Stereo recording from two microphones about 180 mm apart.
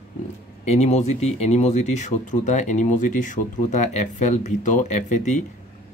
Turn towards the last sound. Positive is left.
turn(degrees=45)  # may be behind; listen again after turning